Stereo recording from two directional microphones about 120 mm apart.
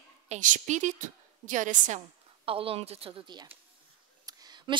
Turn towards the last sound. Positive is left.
turn(degrees=-35)  # may be behind; listen again after turning